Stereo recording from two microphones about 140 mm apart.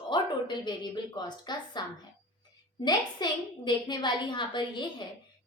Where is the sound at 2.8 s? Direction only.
30° left (ahead or behind).